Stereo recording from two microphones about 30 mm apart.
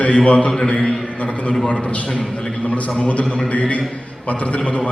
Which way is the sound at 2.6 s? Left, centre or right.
Left.